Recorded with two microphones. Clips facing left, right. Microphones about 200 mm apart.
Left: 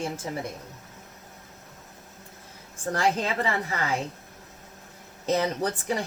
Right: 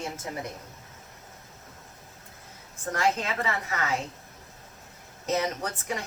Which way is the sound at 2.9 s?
30° left (ahead or behind).